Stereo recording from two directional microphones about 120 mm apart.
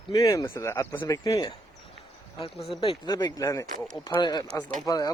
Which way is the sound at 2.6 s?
50° left (ahead or behind).